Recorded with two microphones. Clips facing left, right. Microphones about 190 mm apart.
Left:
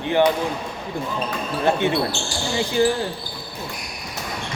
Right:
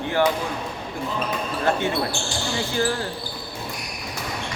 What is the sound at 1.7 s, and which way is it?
Speech, 20° left (ahead or behind).